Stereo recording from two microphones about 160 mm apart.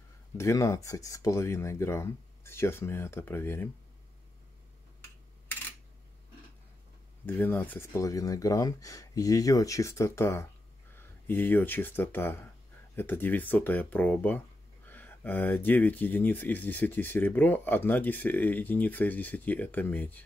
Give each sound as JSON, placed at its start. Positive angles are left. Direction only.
{"t": 0.4, "sound": "speech", "side_deg": 20}
{"t": 7.2, "sound": "speech", "side_deg": 10}